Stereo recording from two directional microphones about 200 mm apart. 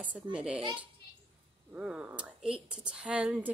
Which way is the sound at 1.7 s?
5° right (ahead or behind).